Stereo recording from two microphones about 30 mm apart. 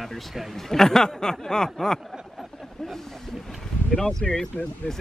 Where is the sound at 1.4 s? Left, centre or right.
Centre.